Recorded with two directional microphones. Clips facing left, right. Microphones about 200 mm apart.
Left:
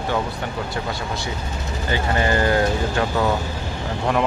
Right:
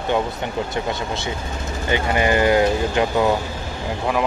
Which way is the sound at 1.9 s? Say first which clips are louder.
Right 2 dB; 15° right (ahead or behind).